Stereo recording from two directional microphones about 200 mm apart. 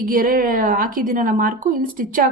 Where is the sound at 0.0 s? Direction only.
45° right (ahead or behind).